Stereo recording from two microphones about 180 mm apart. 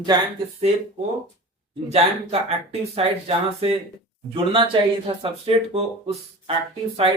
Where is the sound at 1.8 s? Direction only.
35° right (ahead or behind).